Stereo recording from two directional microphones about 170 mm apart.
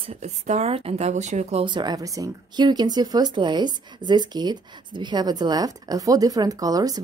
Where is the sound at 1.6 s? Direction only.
25° right (ahead or behind).